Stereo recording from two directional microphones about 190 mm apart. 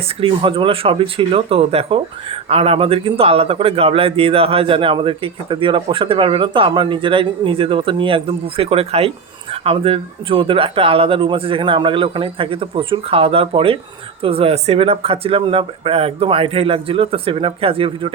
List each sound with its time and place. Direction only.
0.2 s a man's voice: 25° right (ahead or behind)